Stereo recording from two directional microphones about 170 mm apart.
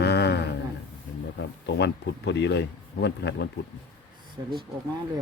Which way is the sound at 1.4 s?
80° left.